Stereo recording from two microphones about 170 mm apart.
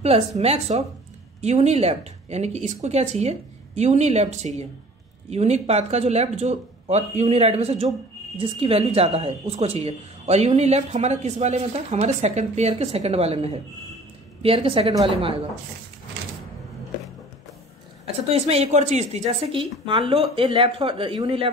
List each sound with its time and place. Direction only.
0.0 s speech: 40° right (ahead or behind)
18.0 s speech: 35° right (ahead or behind)